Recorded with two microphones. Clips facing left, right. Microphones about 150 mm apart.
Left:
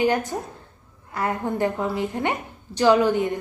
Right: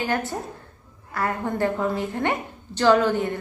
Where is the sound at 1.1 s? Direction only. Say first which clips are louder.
Left 1 dB; 20° left (ahead or behind).